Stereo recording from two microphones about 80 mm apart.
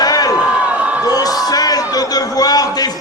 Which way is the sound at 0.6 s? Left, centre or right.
Centre.